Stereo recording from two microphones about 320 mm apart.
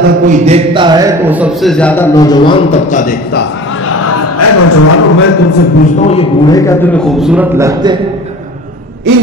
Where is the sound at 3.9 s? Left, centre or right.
Left.